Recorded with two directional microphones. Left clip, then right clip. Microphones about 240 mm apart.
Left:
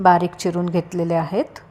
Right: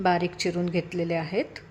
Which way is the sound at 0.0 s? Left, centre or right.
Centre.